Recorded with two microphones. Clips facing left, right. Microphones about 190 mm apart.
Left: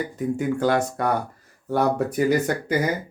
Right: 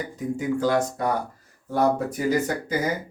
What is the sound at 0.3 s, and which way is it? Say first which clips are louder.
Speech: even; 60° left (ahead or behind).